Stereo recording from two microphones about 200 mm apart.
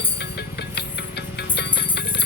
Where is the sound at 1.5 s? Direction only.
55° left (ahead or behind).